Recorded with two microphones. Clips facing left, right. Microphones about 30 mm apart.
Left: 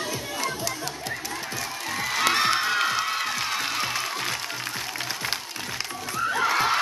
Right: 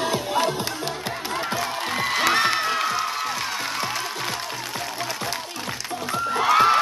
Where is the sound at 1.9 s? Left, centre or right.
Right.